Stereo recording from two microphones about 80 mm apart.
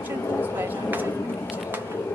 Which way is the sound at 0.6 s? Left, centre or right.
Right.